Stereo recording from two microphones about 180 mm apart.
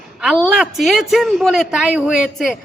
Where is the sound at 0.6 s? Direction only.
Centre (ahead or behind).